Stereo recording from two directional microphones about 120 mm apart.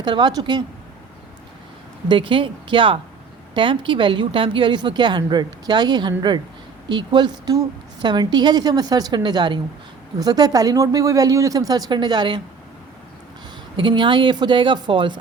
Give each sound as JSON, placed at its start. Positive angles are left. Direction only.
{"t": 0.0, "sound": "a woman's voice", "side_deg": -35}
{"t": 2.0, "sound": "a woman's voice", "side_deg": -45}
{"t": 13.7, "sound": "a woman's voice", "side_deg": -40}